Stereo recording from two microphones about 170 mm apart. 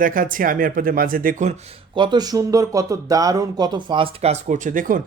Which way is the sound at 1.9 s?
25° right (ahead or behind).